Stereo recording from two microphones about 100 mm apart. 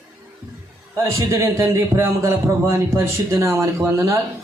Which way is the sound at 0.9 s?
30° right (ahead or behind).